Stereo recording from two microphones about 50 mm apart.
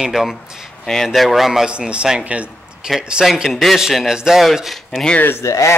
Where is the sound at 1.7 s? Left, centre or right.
Centre.